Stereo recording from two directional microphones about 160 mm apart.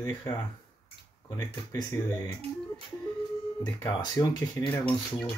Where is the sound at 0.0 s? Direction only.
25° left (ahead or behind).